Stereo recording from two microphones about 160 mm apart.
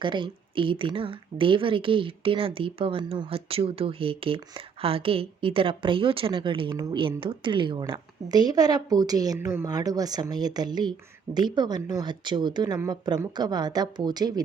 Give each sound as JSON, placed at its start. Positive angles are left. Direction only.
{"t": 0.0, "sound": "speech", "side_deg": -30}